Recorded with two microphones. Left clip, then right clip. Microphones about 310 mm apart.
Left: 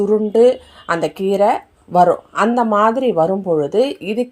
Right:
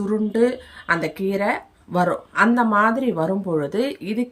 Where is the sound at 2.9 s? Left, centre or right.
Right.